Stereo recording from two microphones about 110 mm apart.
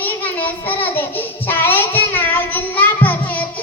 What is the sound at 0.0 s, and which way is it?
Child singing, 15° left (ahead or behind).